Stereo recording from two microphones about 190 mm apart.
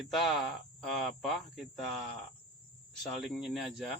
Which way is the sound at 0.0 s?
Centre (ahead or behind).